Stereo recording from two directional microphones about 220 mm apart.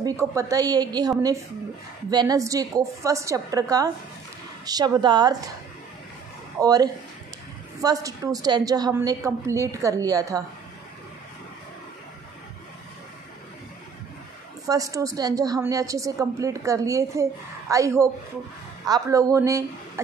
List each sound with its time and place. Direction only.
0.0 s a woman's voice: 15° right (ahead or behind)
6.6 s a woman's voice: 15° right (ahead or behind)
14.7 s a woman's voice: 15° right (ahead or behind)